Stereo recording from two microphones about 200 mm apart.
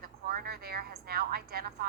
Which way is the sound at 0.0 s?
50° right (ahead or behind).